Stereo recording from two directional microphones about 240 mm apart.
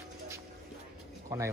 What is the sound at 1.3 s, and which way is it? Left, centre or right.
Speech, centre.